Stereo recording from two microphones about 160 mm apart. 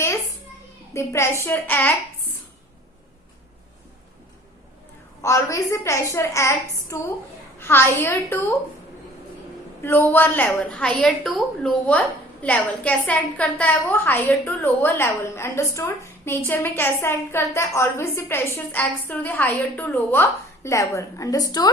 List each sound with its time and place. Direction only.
0.9 s a woman's voice: 15° left (ahead or behind)
5.2 s a woman's voice: 20° left (ahead or behind)
9.8 s a woman's voice: 15° left (ahead or behind)